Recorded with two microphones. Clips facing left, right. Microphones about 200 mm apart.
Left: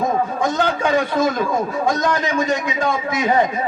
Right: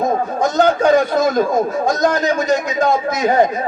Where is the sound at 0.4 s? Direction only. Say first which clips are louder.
Right 9 dB; 40° right (ahead or behind).